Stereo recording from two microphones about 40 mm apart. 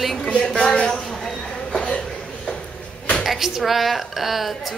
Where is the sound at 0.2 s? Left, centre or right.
Left.